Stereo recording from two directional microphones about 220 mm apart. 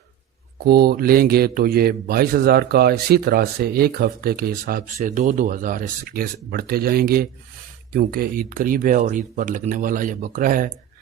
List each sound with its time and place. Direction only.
0.7 s speech: 45° right (ahead or behind)